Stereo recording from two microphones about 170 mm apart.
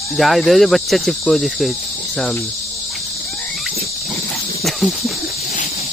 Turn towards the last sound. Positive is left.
turn(degrees=0)  # may be behind; listen again after turning